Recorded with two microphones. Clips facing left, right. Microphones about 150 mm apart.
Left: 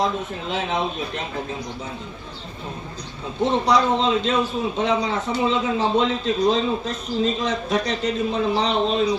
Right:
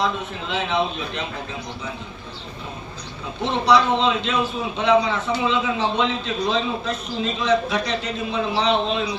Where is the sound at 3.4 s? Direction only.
40° left (ahead or behind).